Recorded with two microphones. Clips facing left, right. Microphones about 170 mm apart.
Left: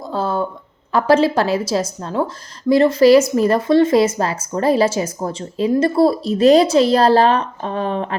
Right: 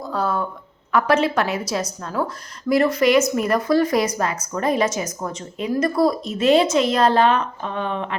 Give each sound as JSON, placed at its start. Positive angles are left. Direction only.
{"t": 0.0, "sound": "a woman's voice", "side_deg": 30}